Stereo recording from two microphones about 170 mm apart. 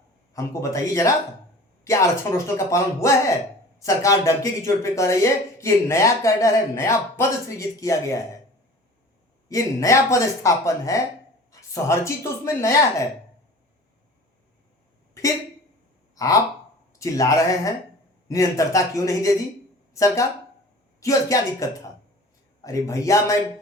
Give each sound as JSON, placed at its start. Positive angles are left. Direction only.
{"t": 0.3, "sound": "speech", "side_deg": 20}
{"t": 9.5, "sound": "speech", "side_deg": 20}
{"t": 15.2, "sound": "a sound", "side_deg": 20}
{"t": 16.1, "sound": "speech", "side_deg": 20}